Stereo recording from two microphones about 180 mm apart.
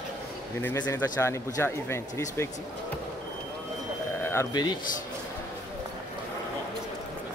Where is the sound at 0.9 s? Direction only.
15° left (ahead or behind).